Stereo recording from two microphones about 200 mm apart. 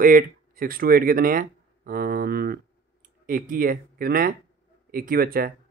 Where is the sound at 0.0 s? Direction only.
45° right (ahead or behind).